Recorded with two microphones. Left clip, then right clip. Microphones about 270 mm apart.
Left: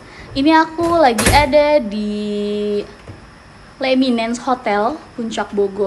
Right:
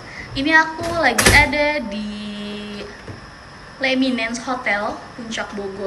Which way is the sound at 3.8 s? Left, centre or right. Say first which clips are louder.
Left 3 dB; centre.